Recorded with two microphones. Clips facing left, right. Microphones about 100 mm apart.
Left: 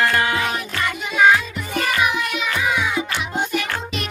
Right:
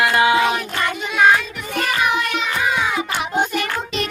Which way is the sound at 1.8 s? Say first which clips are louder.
Right 1 dB; 55° right (ahead or behind).